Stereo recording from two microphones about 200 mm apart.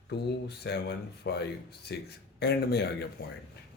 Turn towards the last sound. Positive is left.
turn(degrees=55)  # may be behind; listen again after turning